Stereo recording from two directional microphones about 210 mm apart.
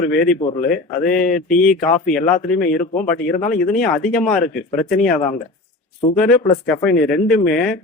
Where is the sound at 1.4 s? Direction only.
40° left (ahead or behind).